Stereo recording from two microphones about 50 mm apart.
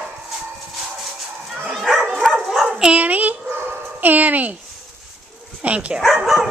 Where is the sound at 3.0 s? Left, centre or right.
Right.